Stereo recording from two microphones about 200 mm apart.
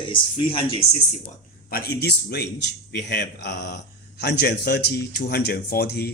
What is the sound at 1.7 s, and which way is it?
Speech, 50° left (ahead or behind).